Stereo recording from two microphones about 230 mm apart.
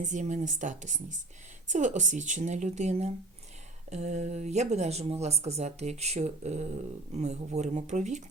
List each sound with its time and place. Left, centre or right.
0.0 s a woman's voice: right